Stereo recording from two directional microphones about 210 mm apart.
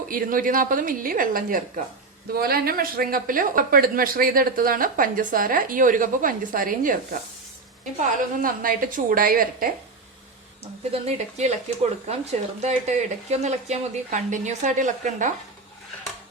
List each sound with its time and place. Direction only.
0.1 s speech: 40° right (ahead or behind)
8.4 s speech: 40° right (ahead or behind)
10.6 s speech: 30° right (ahead or behind)